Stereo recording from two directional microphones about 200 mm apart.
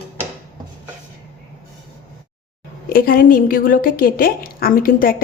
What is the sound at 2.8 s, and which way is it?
A woman's voice, 45° left (ahead or behind).